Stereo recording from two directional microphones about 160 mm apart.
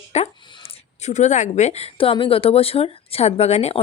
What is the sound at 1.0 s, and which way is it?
A woman's voice, 45° left (ahead or behind).